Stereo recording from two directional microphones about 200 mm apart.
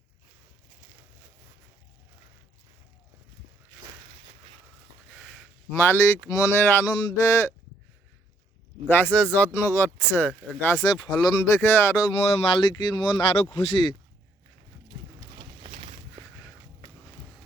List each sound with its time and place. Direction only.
5.7 s speech: 15° left (ahead or behind)
8.9 s speech: 10° left (ahead or behind); by 13.7 s 30° left (ahead or behind)
14.9 s a sound: 35° right (ahead or behind)